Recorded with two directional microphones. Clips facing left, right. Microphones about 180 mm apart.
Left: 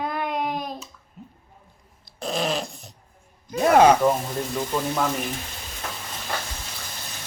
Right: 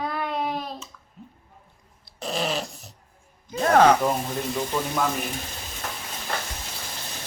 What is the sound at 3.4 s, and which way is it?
Speech, 10° left (ahead or behind).